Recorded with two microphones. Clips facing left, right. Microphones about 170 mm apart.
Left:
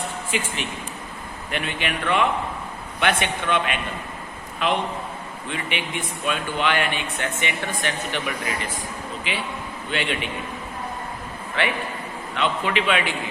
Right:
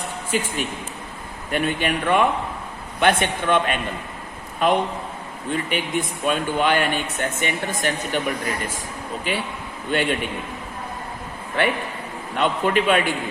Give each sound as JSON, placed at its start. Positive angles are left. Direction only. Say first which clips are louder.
{"t": 0.3, "sound": "speech", "louder": "right 6 dB", "side_deg": -40}
{"t": 12.3, "sound": "speech", "louder": "right 3 dB", "side_deg": -45}